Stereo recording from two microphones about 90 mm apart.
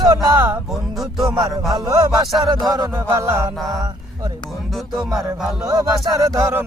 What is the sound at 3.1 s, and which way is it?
Mantra, 30° right (ahead or behind).